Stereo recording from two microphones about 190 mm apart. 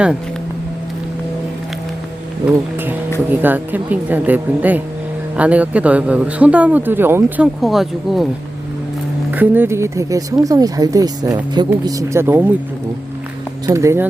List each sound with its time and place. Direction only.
3.2 s speech: 10° right (ahead or behind)
9.3 s speech: 10° right (ahead or behind)
13.7 s speech: 15° right (ahead or behind)